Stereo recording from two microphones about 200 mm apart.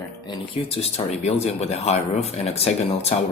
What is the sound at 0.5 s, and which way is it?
Speech, 30° left (ahead or behind).